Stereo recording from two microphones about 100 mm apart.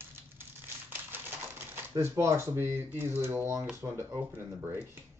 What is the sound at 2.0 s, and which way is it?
Speech, 30° right (ahead or behind).